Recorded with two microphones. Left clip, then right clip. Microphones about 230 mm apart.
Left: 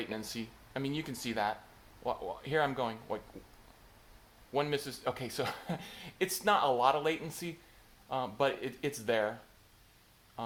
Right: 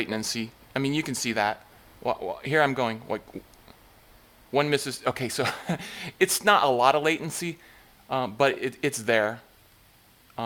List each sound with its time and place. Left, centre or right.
0.0 s speech: right
4.5 s speech: right
10.4 s a sound: right